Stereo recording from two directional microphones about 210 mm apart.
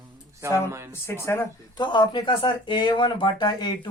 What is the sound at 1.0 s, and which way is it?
Speech, 10° left (ahead or behind).